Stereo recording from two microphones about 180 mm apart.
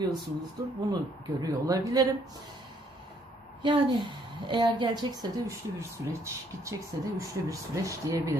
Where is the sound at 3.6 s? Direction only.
25° right (ahead or behind).